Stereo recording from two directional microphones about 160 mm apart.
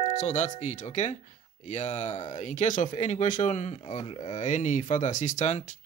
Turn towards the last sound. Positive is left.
turn(degrees=50)  # may be behind; listen again after turning